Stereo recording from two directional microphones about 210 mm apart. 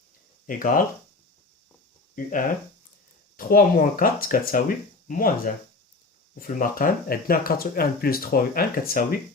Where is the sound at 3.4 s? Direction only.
45° left (ahead or behind).